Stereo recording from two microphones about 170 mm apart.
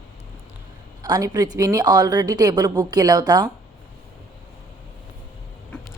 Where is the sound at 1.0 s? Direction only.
20° right (ahead or behind).